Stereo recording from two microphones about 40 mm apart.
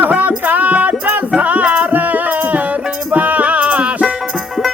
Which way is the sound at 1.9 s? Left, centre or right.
Right.